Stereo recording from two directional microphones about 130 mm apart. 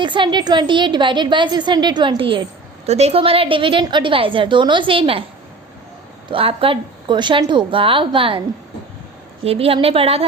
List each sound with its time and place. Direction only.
0.0 s a woman's voice: 35° right (ahead or behind)
6.3 s a woman's voice: 45° right (ahead or behind)
9.4 s a woman's voice: 50° right (ahead or behind)